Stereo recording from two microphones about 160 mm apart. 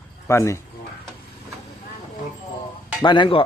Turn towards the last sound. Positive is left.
turn(degrees=30)  # may be behind; listen again after turning